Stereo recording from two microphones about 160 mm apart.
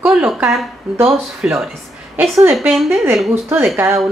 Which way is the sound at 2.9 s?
15° right (ahead or behind).